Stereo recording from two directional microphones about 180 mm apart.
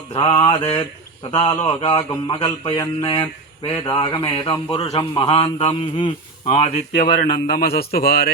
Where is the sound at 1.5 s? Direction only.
35° left (ahead or behind).